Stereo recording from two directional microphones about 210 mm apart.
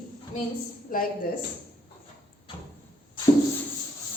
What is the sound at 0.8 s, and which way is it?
Speech, 40° left (ahead or behind).